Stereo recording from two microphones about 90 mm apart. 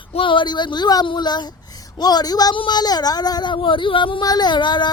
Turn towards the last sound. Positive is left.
turn(degrees=55)  # may be behind; listen again after turning